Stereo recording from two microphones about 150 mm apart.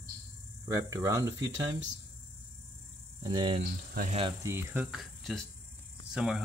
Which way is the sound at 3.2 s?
30° right (ahead or behind).